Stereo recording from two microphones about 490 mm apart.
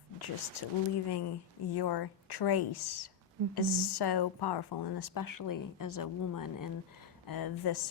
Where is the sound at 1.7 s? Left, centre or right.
Left.